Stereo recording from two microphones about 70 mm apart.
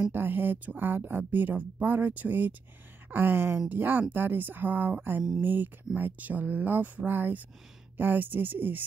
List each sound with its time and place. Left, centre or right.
0.1 s speech: right